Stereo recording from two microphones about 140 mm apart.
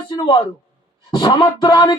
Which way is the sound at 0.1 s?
30° left (ahead or behind).